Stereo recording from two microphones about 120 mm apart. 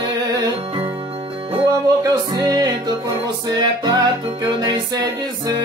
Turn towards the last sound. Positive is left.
turn(degrees=-35)  # may be behind; listen again after turning